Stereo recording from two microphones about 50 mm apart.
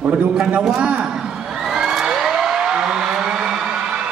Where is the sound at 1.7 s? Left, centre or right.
Centre.